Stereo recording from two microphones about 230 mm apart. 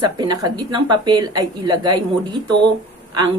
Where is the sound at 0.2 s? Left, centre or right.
Centre.